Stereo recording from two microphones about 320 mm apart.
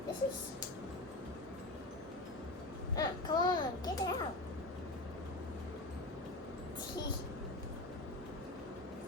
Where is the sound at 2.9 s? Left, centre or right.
Centre.